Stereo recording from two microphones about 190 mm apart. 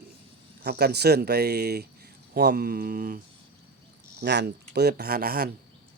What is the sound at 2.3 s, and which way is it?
Mantra, 55° right (ahead or behind).